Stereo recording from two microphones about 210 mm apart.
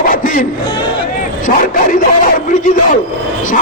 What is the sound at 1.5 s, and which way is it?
Speech, 40° left (ahead or behind).